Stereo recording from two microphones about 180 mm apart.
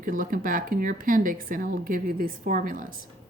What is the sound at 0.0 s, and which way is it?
Speech, 50° right (ahead or behind).